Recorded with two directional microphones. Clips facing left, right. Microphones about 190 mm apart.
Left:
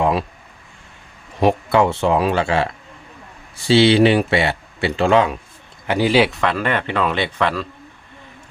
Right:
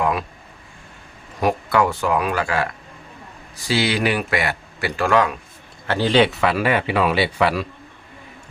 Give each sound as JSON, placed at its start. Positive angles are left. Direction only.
{"t": 0.0, "sound": "a sound", "side_deg": 30}
{"t": 1.4, "sound": "speech", "side_deg": 25}
{"t": 5.9, "sound": "speech", "side_deg": 10}